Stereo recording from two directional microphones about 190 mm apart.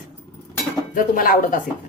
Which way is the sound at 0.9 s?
45° left (ahead or behind).